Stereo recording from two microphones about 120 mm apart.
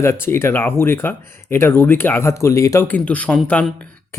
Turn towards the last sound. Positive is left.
turn(degrees=10)  # may be behind; listen again after turning